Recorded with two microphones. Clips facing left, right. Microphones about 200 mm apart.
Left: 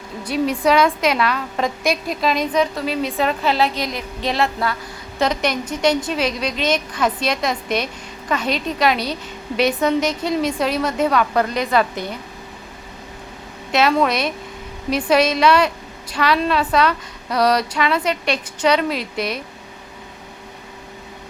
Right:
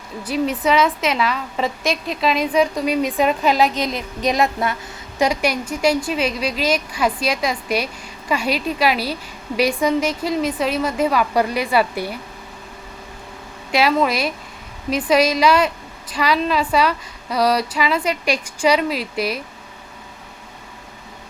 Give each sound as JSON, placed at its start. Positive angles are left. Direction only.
{"t": 0.6, "sound": "a woman's voice", "side_deg": 0}
{"t": 4.3, "sound": "a sound", "side_deg": -20}
{"t": 5.2, "sound": "a woman's voice", "side_deg": -10}
{"t": 13.7, "sound": "a woman's voice", "side_deg": -5}
{"t": 15.4, "sound": "a woman's voice", "side_deg": -5}